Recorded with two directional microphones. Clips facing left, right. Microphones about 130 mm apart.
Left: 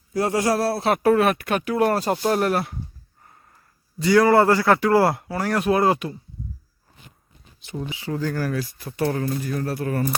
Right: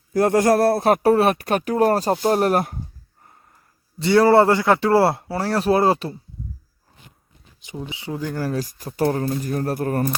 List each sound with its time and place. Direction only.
0.1 s a man's voice: 50° right (ahead or behind)
3.9 s a man's voice: 30° right (ahead or behind)
7.6 s speech: 15° right (ahead or behind)
8.4 s a man's voice: 40° right (ahead or behind)